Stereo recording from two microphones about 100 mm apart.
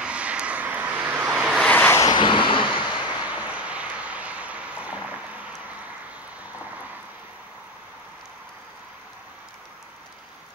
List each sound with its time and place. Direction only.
0.0 s vehicle: 10° right (ahead or behind)
1.6 s vehicle: 15° left (ahead or behind)
2.0 s vehicle: 50° left (ahead or behind)
2.8 s a sound: 45° left (ahead or behind)
3.3 s vehicle: 15° right (ahead or behind)